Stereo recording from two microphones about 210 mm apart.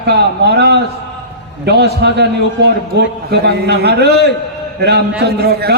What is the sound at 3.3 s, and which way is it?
A man's voice, 50° right (ahead or behind).